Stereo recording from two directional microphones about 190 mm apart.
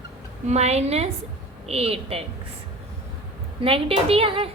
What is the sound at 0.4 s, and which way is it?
A woman's voice, 35° right (ahead or behind).